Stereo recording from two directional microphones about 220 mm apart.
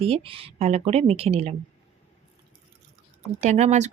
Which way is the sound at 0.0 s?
25° right (ahead or behind).